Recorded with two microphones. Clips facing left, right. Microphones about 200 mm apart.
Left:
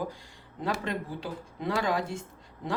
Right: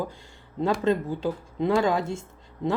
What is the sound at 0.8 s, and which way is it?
Speech, 25° right (ahead or behind).